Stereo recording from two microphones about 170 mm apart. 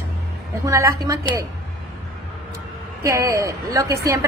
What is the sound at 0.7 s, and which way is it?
Speech, 20° right (ahead or behind).